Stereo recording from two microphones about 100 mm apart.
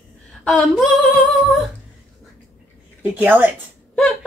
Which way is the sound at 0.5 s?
Centre (ahead or behind).